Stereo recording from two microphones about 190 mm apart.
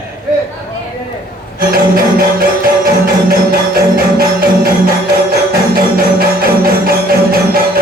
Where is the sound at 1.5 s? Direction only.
50° right (ahead or behind).